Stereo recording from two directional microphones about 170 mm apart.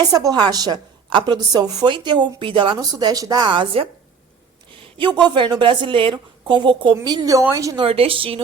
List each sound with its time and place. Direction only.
0.0 s a woman's voice: 20° right (ahead or behind)
7.9 s a woman's voice: 35° right (ahead or behind)